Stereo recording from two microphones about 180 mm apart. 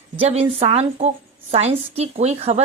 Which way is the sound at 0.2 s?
35° right (ahead or behind).